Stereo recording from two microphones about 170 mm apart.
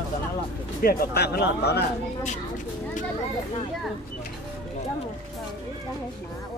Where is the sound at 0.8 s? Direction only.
65° left (ahead or behind).